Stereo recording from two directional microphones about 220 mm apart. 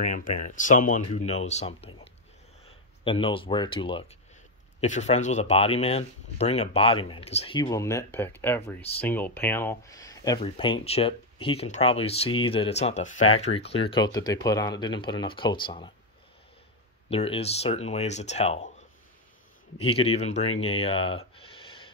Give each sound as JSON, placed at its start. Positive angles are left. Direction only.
{"t": 0.0, "sound": "speech", "side_deg": 35}
{"t": 3.0, "sound": "speech", "side_deg": 25}
{"t": 17.1, "sound": "speech", "side_deg": 25}
{"t": 19.8, "sound": "speech", "side_deg": 25}
{"t": 21.4, "sound": "a sound", "side_deg": 25}